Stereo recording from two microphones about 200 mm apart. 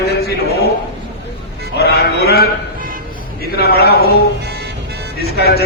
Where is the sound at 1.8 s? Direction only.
50° left (ahead or behind).